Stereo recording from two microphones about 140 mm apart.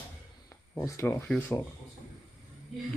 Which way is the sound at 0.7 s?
20° left (ahead or behind).